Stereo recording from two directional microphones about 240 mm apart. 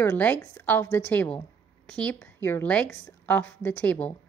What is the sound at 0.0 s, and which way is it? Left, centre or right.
Speech, centre.